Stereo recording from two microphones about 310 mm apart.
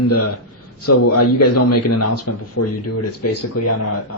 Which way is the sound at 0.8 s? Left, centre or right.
Left.